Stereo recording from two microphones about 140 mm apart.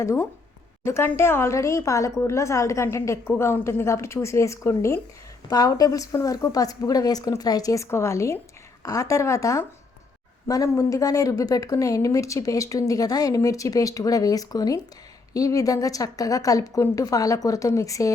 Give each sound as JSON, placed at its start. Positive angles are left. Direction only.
{"t": 0.0, "sound": "speech", "side_deg": 20}